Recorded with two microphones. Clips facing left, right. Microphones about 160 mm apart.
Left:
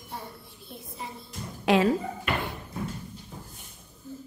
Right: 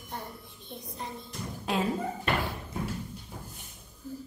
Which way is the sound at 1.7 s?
90° left.